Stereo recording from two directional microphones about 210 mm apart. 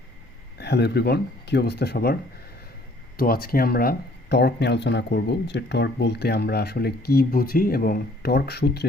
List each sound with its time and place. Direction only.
0.6 s speech: 50° left (ahead or behind)
3.2 s speech: 45° left (ahead or behind)